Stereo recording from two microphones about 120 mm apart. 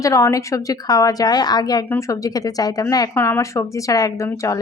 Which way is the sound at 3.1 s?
20° left (ahead or behind).